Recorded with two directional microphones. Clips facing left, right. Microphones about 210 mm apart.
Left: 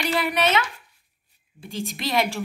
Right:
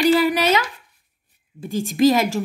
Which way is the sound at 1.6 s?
50° right (ahead or behind).